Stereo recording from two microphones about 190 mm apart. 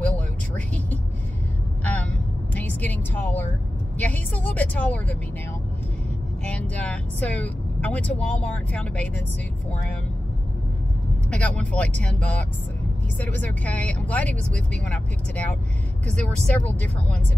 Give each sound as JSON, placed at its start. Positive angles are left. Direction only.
{"t": 2.5, "sound": "vehicle", "side_deg": 10}
{"t": 4.0, "sound": "speech", "side_deg": 5}
{"t": 6.4, "sound": "speech", "side_deg": 5}
{"t": 11.2, "sound": "speech", "side_deg": 5}